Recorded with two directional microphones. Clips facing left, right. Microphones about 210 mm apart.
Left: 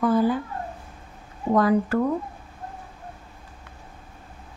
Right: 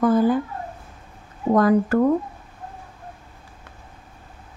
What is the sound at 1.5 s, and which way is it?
Speech, 45° right (ahead or behind).